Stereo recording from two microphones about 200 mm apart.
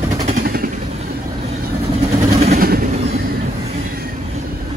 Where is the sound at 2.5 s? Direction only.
50° right (ahead or behind).